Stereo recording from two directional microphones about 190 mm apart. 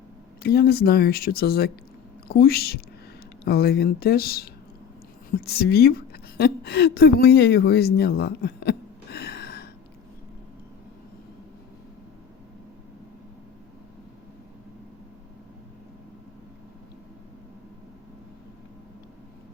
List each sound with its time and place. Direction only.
0.4 s a woman's voice: 55° left (ahead or behind)